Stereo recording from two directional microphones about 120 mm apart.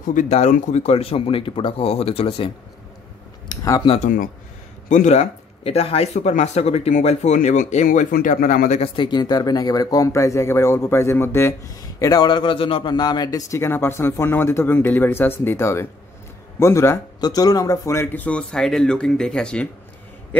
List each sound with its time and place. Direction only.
0.0 s speech: 90° left; by 2.5 s 55° left (ahead or behind)
3.4 s a sound: 30° left (ahead or behind)
4.8 s speech: 90° left
8.9 s speech: 40° left (ahead or behind); by 11.5 s 20° left (ahead or behind)
12.0 s a man's voice: 35° left (ahead or behind)
13.5 s speech: 20° left (ahead or behind)
17.2 s speech: 30° left (ahead or behind); by 19.7 s 10° left (ahead or behind)